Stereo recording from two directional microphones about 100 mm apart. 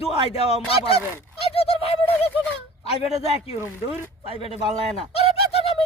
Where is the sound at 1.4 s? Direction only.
80° left.